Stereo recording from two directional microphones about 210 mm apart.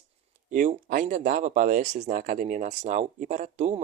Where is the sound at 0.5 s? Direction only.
40° right (ahead or behind).